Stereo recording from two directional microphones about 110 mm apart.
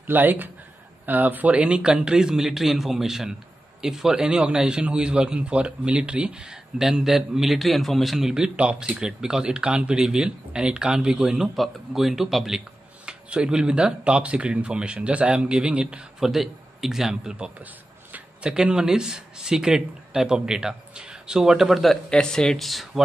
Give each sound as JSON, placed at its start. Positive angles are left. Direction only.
{"t": 0.0, "sound": "a man's voice", "side_deg": -15}